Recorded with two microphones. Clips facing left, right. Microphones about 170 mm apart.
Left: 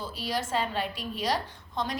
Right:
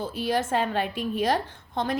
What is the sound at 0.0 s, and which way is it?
A woman's voice, 55° right (ahead or behind).